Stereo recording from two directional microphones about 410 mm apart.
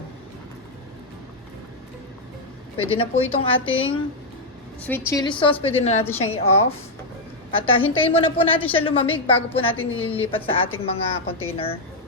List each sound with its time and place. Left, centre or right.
2.8 s a woman's voice: centre
3.7 s a woman's voice: left
4.8 s a woman's voice: centre